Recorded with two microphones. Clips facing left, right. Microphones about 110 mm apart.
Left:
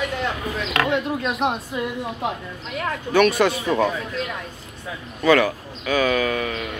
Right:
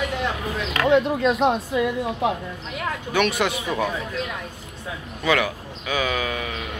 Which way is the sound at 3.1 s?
15° right (ahead or behind).